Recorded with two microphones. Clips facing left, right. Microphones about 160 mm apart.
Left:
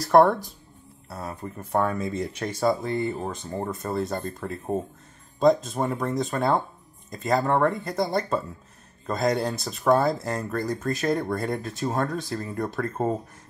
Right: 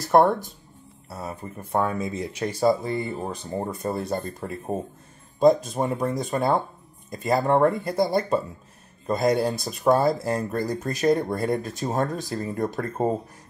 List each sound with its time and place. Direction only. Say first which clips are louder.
0.1 s speech: left 1 dB; centre (ahead or behind); by 13.1 s 15° right (ahead or behind)